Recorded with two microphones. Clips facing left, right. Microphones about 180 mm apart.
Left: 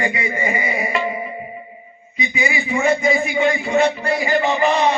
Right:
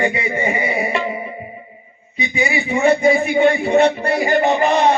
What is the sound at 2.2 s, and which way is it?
Speech, 30° right (ahead or behind).